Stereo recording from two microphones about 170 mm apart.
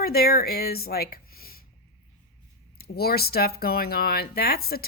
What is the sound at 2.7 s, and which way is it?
Speech, 65° left (ahead or behind).